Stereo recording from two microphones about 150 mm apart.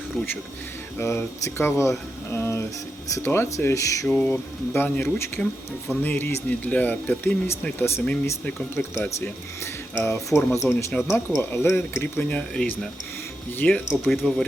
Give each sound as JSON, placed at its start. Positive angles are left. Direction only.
{"t": 0.9, "sound": "speech", "side_deg": 20}
{"t": 5.0, "sound": "speech", "side_deg": 0}
{"t": 5.9, "sound": "speech", "side_deg": 10}
{"t": 13.6, "sound": "speech", "side_deg": 10}